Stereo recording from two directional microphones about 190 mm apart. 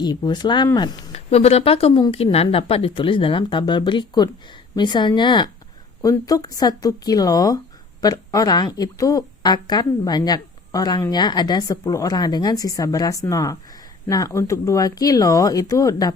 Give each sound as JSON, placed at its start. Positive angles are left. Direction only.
{"t": 0.0, "sound": "speech", "side_deg": 25}
{"t": 1.1, "sound": "speech", "side_deg": 35}